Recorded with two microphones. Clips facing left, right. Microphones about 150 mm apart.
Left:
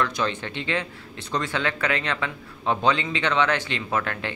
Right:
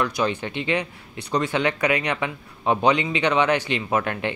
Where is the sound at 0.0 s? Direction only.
15° right (ahead or behind).